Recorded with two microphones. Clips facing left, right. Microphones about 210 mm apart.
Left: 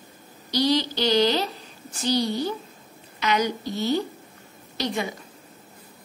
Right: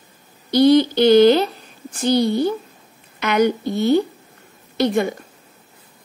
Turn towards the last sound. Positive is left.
turn(degrees=-55)  # may be behind; listen again after turning